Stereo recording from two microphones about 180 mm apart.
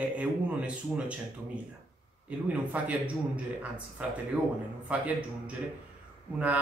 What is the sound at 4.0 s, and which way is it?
Speech, 5° right (ahead or behind).